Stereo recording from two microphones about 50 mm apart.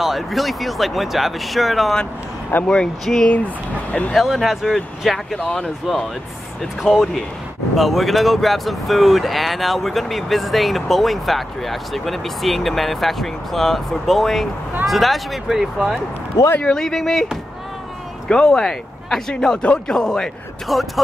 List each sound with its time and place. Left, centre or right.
0.0 s speech: centre
2.6 s speech: centre
3.3 s speech: left
4.2 s speech: centre
5.4 s speech: centre
5.9 s speech: centre
6.8 s speech: centre
16.6 s speech: centre
18.3 s speech: centre
20.6 s speech: centre